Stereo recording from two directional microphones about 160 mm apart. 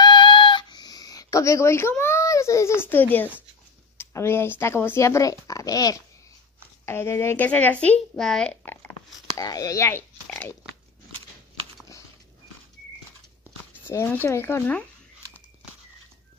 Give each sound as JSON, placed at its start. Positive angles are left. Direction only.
{"t": 0.0, "sound": "a sound", "side_deg": 30}
{"t": 4.0, "sound": "speech", "side_deg": 15}
{"t": 9.4, "sound": "speech", "side_deg": 20}
{"t": 13.8, "sound": "speech", "side_deg": 15}